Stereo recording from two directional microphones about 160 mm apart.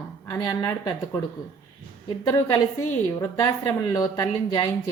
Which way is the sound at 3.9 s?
25° left (ahead or behind).